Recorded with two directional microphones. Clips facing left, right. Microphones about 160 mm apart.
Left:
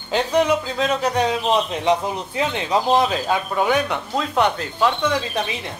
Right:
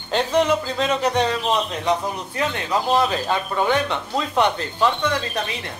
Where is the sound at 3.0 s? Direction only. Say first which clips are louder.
Left 1 dB; 5° left (ahead or behind).